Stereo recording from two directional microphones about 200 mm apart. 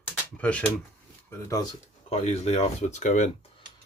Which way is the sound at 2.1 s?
35° left (ahead or behind).